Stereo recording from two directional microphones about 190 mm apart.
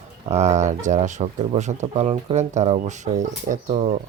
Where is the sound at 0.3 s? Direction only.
35° right (ahead or behind).